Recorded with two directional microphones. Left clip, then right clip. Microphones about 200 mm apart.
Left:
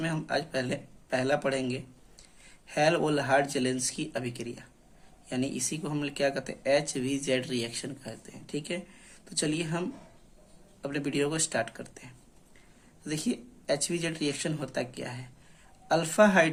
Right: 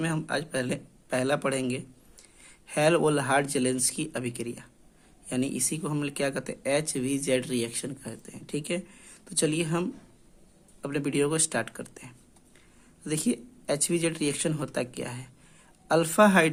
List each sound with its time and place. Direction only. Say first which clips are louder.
0.0 s speech: right 1 dB; 45° right (ahead or behind)
10.8 s speech: right 3 dB; 45° right (ahead or behind)